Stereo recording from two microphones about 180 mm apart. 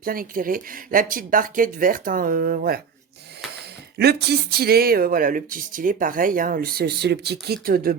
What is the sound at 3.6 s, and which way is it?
Speech, 65° right (ahead or behind).